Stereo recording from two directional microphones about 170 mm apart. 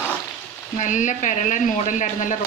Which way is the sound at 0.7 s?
45° left (ahead or behind).